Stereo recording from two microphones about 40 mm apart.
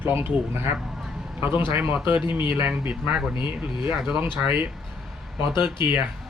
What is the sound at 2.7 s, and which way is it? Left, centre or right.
Speech, right.